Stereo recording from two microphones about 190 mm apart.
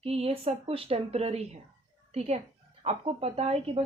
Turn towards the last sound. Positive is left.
turn(degrees=-30)  # may be behind; listen again after turning